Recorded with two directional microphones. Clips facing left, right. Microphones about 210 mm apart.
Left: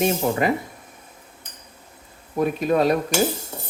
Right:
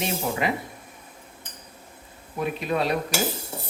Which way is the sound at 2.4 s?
45° left (ahead or behind).